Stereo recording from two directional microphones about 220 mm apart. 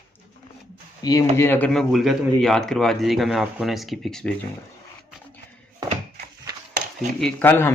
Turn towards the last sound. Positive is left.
turn(degrees=10)  # may be behind; listen again after turning